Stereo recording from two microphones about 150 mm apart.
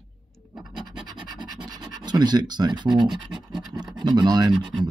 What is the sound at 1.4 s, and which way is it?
Scratch, 30° right (ahead or behind).